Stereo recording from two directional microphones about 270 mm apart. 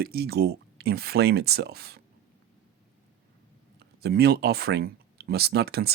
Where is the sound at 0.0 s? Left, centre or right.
Right.